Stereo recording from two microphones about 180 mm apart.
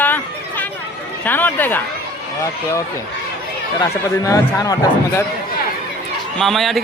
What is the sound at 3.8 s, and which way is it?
Speech, 20° left (ahead or behind).